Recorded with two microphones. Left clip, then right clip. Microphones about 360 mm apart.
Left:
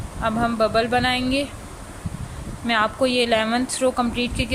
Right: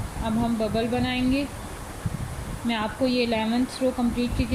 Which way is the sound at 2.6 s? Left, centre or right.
Centre.